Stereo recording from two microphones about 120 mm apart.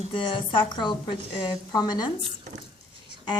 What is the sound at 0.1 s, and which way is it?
A woman's voice, 45° left (ahead or behind).